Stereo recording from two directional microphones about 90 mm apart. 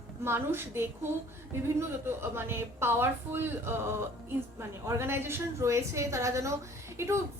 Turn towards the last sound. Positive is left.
turn(degrees=-30)  # may be behind; listen again after turning